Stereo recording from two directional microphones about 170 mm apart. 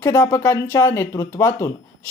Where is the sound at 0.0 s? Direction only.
15° left (ahead or behind).